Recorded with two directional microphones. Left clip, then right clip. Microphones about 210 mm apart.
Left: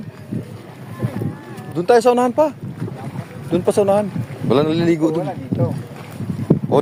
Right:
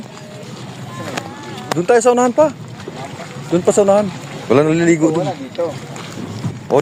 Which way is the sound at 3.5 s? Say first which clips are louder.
Right 3 dB; 15° left (ahead or behind).